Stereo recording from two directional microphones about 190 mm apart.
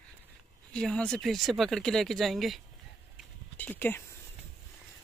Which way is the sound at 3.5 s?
10° left (ahead or behind).